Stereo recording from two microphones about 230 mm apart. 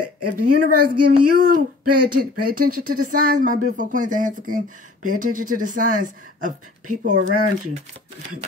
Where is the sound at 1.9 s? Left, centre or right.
Right.